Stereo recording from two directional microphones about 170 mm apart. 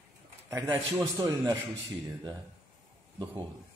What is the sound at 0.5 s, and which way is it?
Speech, 20° right (ahead or behind).